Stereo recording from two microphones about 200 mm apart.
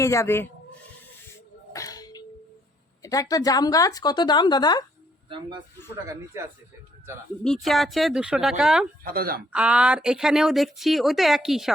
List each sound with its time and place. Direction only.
0.0 s speech: 15° left (ahead or behind)
1.7 s music: 15° left (ahead or behind)
3.0 s speech: 15° left (ahead or behind)
5.3 s speech: 25° right (ahead or behind)
5.9 s speech: 10° right (ahead or behind)
7.4 s speech: centre (ahead or behind)
9.0 s speech: 45° right (ahead or behind)
9.5 s speech: 5° right (ahead or behind)